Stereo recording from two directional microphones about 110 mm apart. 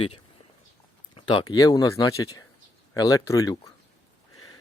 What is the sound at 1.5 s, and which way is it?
Speech, 35° left (ahead or behind).